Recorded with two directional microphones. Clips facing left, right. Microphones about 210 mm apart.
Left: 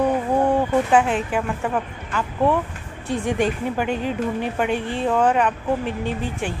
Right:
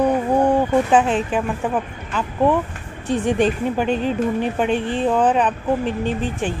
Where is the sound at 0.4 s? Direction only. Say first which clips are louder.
Right 2 dB; 15° right (ahead or behind).